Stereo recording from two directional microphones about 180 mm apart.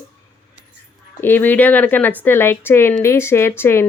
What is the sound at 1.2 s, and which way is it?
A woman's voice, 10° left (ahead or behind).